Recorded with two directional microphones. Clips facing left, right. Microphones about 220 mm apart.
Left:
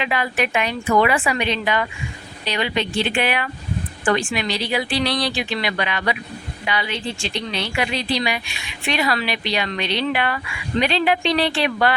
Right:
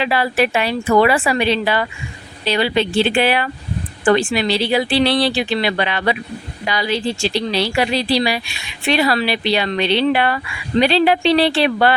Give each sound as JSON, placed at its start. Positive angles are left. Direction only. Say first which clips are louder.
{"t": 0.0, "sound": "speech", "louder": "right 5 dB", "side_deg": -35}